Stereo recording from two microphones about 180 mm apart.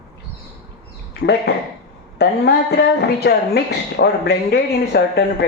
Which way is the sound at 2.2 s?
65° left (ahead or behind).